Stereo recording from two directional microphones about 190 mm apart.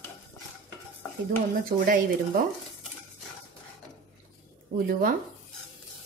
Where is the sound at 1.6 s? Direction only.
50° right (ahead or behind).